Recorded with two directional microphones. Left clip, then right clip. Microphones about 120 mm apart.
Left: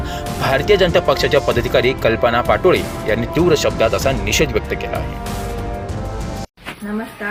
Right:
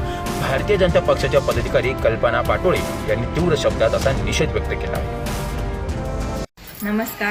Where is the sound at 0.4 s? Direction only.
25° left (ahead or behind).